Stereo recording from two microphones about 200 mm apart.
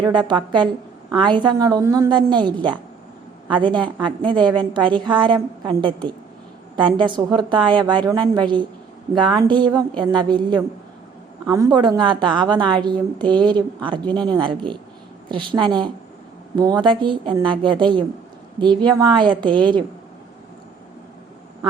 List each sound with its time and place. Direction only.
0.0 s a woman's voice: 20° right (ahead or behind)